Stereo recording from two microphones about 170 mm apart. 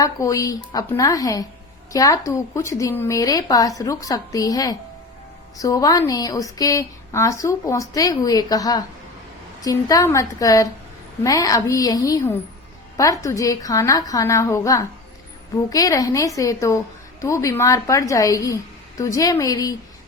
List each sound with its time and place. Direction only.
0.0 s a woman's voice: 20° left (ahead or behind)